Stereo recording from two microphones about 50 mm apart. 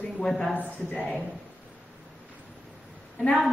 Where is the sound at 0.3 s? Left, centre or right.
Centre.